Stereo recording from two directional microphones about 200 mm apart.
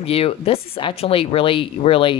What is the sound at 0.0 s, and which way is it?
Speech, 30° left (ahead or behind).